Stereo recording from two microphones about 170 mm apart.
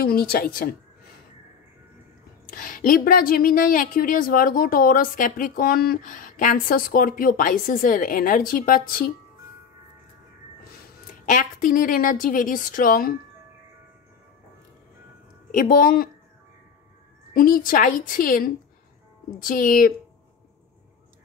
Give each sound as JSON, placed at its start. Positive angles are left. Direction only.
{"t": 0.0, "sound": "speech", "side_deg": 65}
{"t": 2.5, "sound": "speech", "side_deg": 55}
{"t": 11.2, "sound": "a woman's voice", "side_deg": 50}
{"t": 15.5, "sound": "speech", "side_deg": 55}
{"t": 17.3, "sound": "a woman's voice", "side_deg": 55}